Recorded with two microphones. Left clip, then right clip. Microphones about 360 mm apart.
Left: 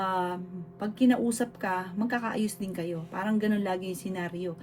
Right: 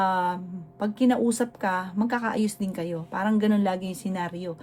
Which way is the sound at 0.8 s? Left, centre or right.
Right.